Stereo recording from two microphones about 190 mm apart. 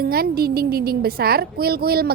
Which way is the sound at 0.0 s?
55° right (ahead or behind).